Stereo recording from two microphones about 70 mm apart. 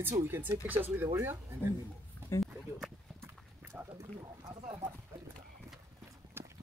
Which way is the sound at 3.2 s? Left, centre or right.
Right.